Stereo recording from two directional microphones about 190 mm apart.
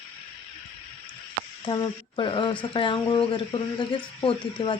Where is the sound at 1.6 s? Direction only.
25° left (ahead or behind).